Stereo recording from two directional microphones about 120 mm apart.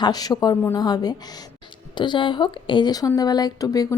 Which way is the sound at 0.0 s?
35° left (ahead or behind).